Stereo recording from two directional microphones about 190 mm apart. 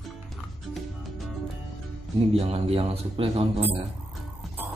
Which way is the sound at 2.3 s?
30° right (ahead or behind).